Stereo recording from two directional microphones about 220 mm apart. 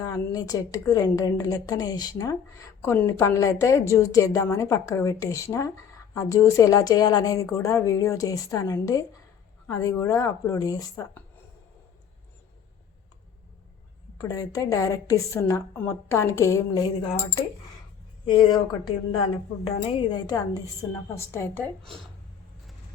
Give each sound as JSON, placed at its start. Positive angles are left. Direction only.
{"t": 0.0, "sound": "a woman's voice", "side_deg": 15}
{"t": 14.2, "sound": "a woman's voice", "side_deg": 15}
{"t": 18.3, "sound": "a woman's voice", "side_deg": 20}